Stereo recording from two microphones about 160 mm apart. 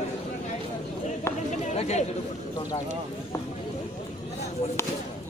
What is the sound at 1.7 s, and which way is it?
Chatter, 45° left (ahead or behind).